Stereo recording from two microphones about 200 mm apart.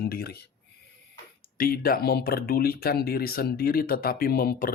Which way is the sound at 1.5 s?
45° left (ahead or behind).